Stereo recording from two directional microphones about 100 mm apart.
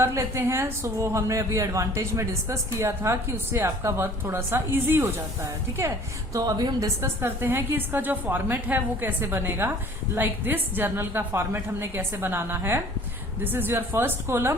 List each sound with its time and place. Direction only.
0.0 s a woman's voice: 25° right (ahead or behind)
6.3 s a woman's voice: 40° right (ahead or behind); by 14.5 s 25° right (ahead or behind)